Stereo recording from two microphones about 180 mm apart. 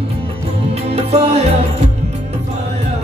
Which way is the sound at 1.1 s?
35° right (ahead or behind).